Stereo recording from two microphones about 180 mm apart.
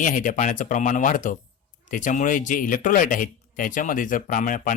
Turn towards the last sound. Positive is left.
turn(degrees=50)  # may be behind; listen again after turning